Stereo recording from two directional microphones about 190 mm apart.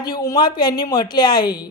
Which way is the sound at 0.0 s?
20° left (ahead or behind).